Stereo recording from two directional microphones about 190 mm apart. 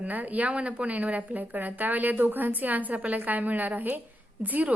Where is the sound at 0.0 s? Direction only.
10° right (ahead or behind).